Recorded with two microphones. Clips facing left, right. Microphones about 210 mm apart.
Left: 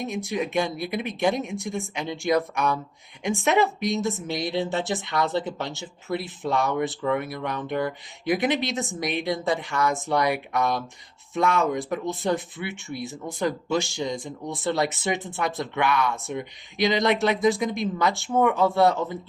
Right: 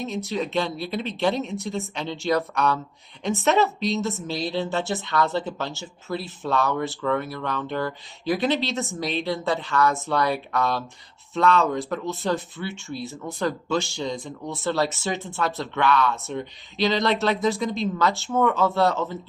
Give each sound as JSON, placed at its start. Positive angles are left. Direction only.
{"t": 0.3, "sound": "speech", "side_deg": 15}